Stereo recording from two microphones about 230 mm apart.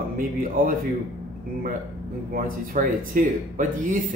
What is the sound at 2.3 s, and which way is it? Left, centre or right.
Speech, right.